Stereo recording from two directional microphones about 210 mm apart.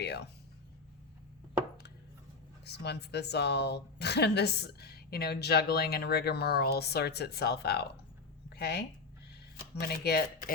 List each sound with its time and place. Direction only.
0.0 s speech: 55° left (ahead or behind)
2.6 s a woman's voice: 50° left (ahead or behind)
9.8 s a woman's voice: 50° left (ahead or behind)